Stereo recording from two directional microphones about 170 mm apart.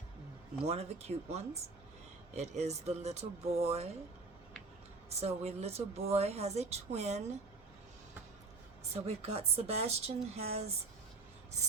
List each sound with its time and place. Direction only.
0.7 s a woman's voice: 40° right (ahead or behind)
5.0 s a woman's voice: 40° right (ahead or behind)
8.9 s a woman's voice: 40° right (ahead or behind)